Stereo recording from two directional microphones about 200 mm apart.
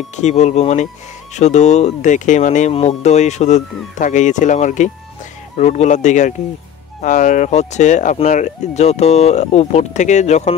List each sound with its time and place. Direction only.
0.1 s speech: 35° left (ahead or behind)